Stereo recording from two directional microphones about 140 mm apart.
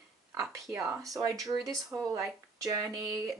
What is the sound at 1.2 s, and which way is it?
Speech, 25° right (ahead or behind).